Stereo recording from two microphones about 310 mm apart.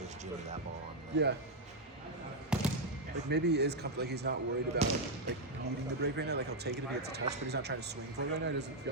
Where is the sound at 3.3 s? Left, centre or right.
Right.